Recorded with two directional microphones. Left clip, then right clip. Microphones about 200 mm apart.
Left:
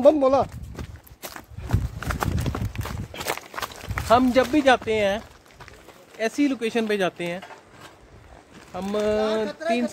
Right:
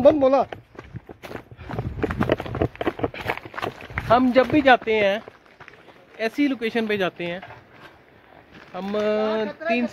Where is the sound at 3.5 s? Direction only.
5° right (ahead or behind).